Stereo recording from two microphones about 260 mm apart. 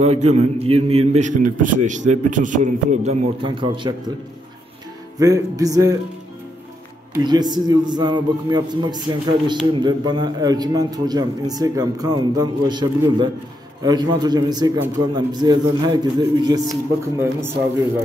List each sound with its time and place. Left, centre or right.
0.0 s a man's voice: right
5.2 s a man's voice: centre
7.2 s a man's voice: centre